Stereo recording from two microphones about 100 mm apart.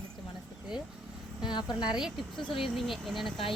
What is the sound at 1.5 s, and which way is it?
A woman's voice, 45° left (ahead or behind).